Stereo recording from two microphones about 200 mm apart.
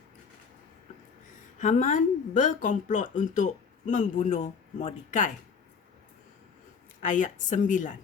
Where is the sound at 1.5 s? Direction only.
40° left (ahead or behind).